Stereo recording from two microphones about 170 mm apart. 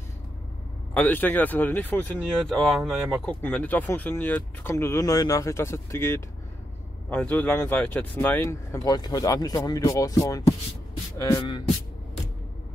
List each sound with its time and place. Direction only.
0.9 s speech: 10° left (ahead or behind)
2.5 s speech: centre (ahead or behind); by 10.5 s 20° left (ahead or behind)
11.1 s beatboxing: 20° left (ahead or behind)